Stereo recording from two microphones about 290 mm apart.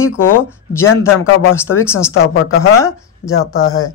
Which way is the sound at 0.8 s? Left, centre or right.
Left.